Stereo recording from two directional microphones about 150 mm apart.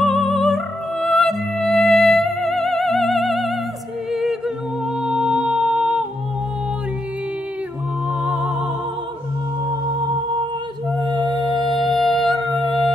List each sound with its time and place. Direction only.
0.0 s music: centre (ahead or behind)
5.0 s humming: 5° right (ahead or behind)
9.7 s music: 30° right (ahead or behind)
11.7 s music: centre (ahead or behind)